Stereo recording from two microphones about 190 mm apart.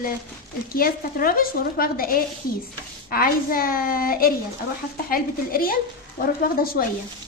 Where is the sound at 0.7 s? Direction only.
50° left (ahead or behind).